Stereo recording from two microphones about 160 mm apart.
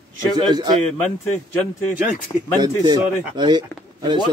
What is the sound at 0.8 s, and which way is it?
Speech, 5° left (ahead or behind).